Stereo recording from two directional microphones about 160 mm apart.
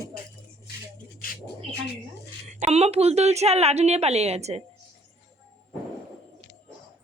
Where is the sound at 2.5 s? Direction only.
45° right (ahead or behind).